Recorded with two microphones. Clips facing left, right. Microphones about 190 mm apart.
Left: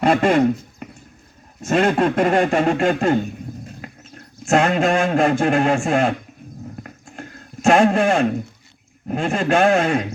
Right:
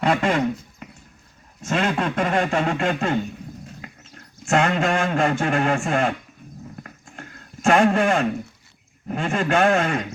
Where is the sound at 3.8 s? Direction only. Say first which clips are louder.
Left 4 dB; 35° left (ahead or behind).